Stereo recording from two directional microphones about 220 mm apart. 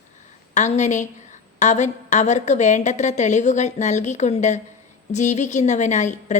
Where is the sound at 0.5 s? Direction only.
35° left (ahead or behind).